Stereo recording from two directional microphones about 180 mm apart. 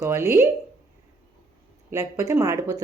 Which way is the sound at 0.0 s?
15° right (ahead or behind).